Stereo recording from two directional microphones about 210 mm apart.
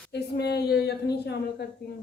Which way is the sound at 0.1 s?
50° left (ahead or behind).